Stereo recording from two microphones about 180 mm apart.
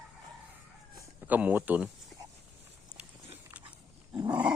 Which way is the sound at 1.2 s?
10° right (ahead or behind).